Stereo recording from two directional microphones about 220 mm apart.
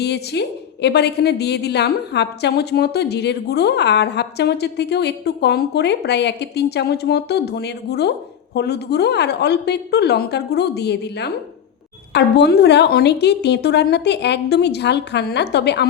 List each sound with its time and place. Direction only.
0.0 s a woman's voice: 50° left (ahead or behind)